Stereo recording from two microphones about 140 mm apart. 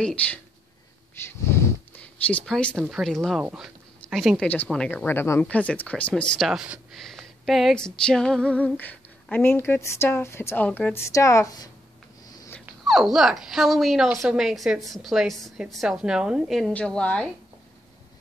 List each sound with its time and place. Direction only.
0.0 s female singing: 10° left (ahead or behind)
1.2 s snort: 20° left (ahead or behind)
2.2 s female singing: 10° left (ahead or behind)
2.7 s a woman's voice: 5° right (ahead or behind)
4.6 s female singing: 5° left (ahead or behind); by 11.7 s 25° left (ahead or behind)
12.8 s a woman's voice: centre (ahead or behind)